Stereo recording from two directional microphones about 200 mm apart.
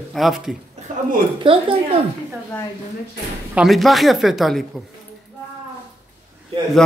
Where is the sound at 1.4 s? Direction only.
25° right (ahead or behind).